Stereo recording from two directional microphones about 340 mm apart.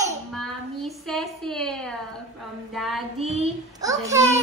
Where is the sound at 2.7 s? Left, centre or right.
Centre.